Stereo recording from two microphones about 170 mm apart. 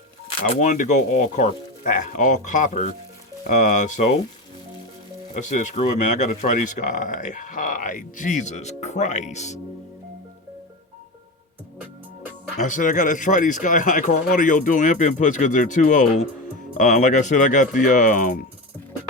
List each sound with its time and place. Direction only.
0.6 s speech: 45° left (ahead or behind)
5.3 s speech: 45° left (ahead or behind)
11.8 s music: 10° right (ahead or behind)
12.6 s speech: 50° left (ahead or behind)